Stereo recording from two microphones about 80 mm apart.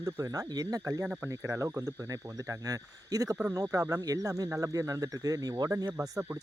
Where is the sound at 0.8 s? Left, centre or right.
Right.